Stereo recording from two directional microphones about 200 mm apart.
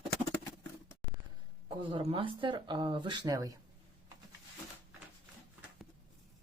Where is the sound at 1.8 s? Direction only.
25° right (ahead or behind).